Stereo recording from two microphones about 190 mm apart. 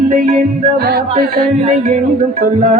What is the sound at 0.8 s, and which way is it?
Music, 55° right (ahead or behind).